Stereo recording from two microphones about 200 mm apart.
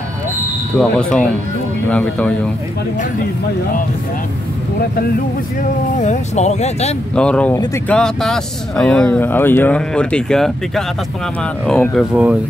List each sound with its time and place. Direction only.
0.7 s speech: 5° left (ahead or behind)
5.6 s speech: 35° left (ahead or behind)
7.2 s speech: 5° left (ahead or behind)
11.6 s speech: 5° left (ahead or behind)